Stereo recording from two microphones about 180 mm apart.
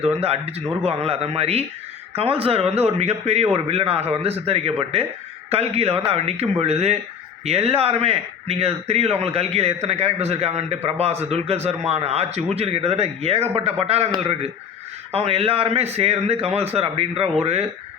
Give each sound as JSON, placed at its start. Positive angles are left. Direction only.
{"t": 0.0, "sound": "a man's voice", "side_deg": -35}
{"t": 15.1, "sound": "a man's voice", "side_deg": -35}